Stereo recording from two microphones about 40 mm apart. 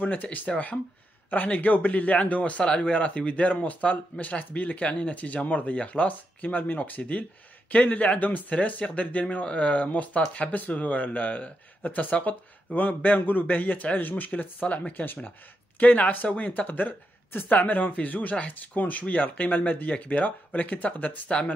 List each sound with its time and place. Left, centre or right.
0.0 s speech: left
2.6 s a man's voice: left